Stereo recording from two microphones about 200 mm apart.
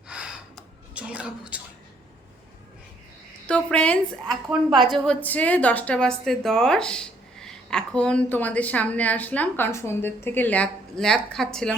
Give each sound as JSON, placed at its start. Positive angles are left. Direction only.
{"t": 0.1, "sound": "gasp", "side_deg": -5}
{"t": 3.4, "sound": "a woman's voice", "side_deg": 5}
{"t": 4.3, "sound": "a woman's voice", "side_deg": -20}
{"t": 4.9, "sound": "a woman's voice", "side_deg": 5}